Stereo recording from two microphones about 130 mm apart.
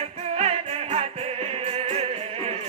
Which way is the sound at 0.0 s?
55° right (ahead or behind).